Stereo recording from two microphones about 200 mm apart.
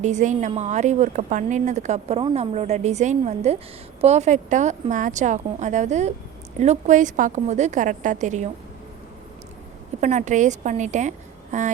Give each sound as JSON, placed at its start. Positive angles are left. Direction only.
{"t": 0.0, "sound": "speech", "side_deg": -35}
{"t": 10.0, "sound": "speech", "side_deg": -35}